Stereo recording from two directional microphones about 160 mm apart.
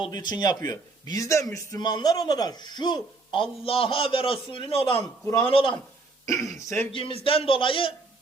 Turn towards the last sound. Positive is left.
turn(degrees=35)  # may be behind; listen again after turning